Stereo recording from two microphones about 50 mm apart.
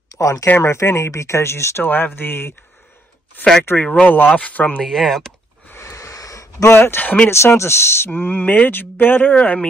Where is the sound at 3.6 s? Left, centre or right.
Left.